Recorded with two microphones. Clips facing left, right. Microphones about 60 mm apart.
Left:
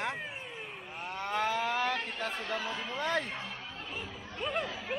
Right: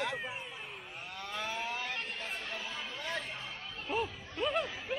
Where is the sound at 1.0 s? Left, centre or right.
Left.